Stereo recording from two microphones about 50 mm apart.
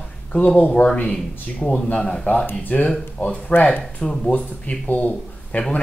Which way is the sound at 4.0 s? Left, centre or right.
Centre.